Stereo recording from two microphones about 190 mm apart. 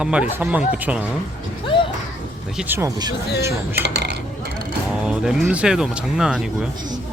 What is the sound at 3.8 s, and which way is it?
Speech, 60° right (ahead or behind).